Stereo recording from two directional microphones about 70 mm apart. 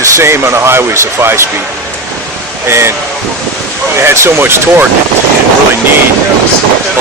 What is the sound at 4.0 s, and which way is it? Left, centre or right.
Speech, right.